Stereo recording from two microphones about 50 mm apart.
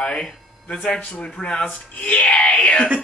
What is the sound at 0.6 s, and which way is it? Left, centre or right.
Speech, left.